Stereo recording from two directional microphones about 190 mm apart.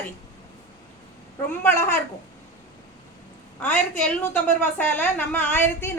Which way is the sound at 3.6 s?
10° left (ahead or behind).